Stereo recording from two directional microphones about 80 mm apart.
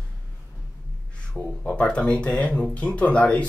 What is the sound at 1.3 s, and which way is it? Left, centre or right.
Speech, centre.